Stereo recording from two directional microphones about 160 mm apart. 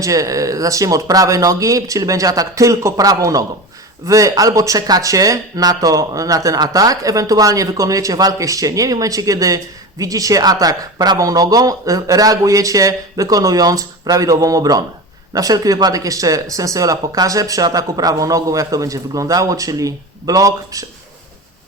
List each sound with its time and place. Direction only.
0.0 s speech: 20° right (ahead or behind)